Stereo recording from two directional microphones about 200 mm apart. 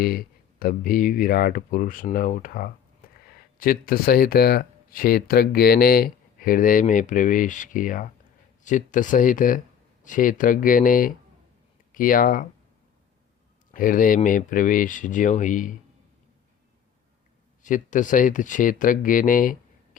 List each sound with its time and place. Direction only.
0.0 s speech: 50° left (ahead or behind)
13.7 s speech: 45° left (ahead or behind)
17.6 s speech: 40° left (ahead or behind)